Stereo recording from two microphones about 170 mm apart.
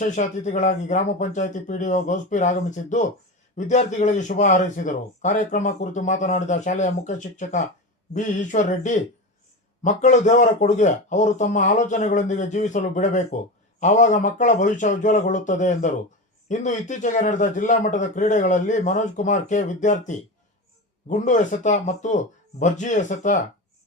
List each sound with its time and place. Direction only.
0.0 s a man's voice: 45° left (ahead or behind)